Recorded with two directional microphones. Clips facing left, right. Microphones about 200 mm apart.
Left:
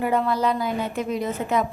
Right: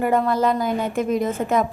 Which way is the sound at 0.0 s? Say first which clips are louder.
Right 3 dB; 50° right (ahead or behind).